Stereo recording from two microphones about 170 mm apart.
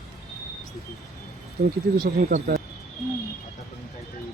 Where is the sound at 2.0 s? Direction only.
60° right (ahead or behind).